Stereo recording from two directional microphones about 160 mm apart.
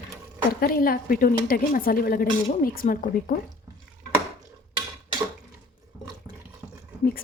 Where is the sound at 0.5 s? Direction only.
65° left (ahead or behind).